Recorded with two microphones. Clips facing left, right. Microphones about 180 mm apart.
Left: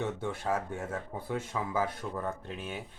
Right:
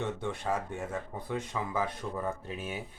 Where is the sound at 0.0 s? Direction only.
5° left (ahead or behind).